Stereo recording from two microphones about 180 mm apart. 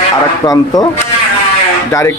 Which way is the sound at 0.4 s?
20° left (ahead or behind).